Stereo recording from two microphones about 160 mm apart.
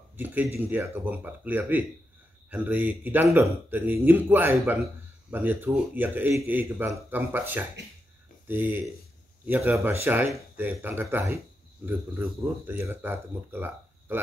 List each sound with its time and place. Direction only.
0.2 s speech: 10° right (ahead or behind)